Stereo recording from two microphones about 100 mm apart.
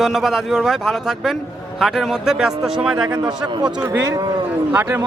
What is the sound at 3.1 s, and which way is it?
Speech, 40° right (ahead or behind).